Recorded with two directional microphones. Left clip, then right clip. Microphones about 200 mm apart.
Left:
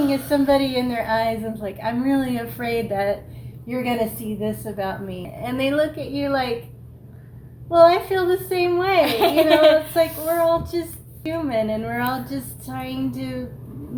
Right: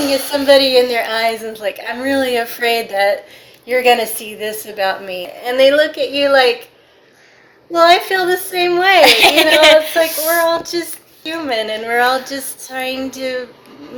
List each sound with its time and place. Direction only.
0.0 s a woman's voice: 30° right (ahead or behind)
7.7 s a woman's voice: 25° right (ahead or behind)
9.0 s a child's voice: 45° right (ahead or behind)
10.7 s a woman's voice: 25° right (ahead or behind)